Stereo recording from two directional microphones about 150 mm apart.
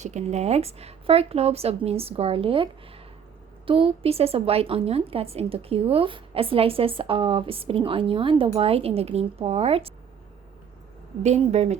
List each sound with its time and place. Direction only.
0.0 s a woman's voice: 50° right (ahead or behind)
11.2 s a woman's voice: 45° right (ahead or behind)